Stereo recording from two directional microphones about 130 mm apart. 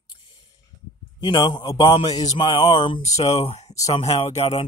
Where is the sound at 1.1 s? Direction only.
35° left (ahead or behind).